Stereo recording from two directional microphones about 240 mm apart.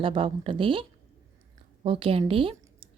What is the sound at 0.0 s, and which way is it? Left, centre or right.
Speech, right.